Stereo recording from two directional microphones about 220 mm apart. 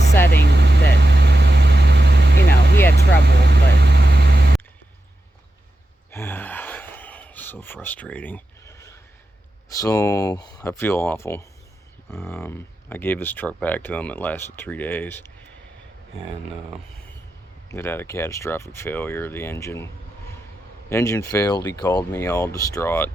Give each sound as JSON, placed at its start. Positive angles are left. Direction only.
{"t": 0.4, "sound": "vehicle", "side_deg": -50}
{"t": 6.1, "sound": "gasp", "side_deg": 10}
{"t": 9.7, "sound": "speech", "side_deg": 15}
{"t": 17.7, "sound": "speech", "side_deg": 10}